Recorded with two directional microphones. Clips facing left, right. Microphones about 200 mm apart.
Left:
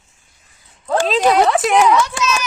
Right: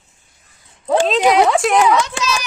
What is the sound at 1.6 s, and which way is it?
Speech, centre (ahead or behind).